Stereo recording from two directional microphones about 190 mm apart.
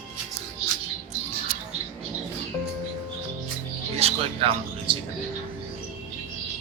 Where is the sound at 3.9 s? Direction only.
30° right (ahead or behind).